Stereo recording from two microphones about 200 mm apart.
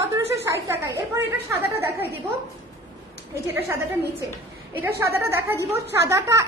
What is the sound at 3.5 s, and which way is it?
A woman's voice, 15° right (ahead or behind).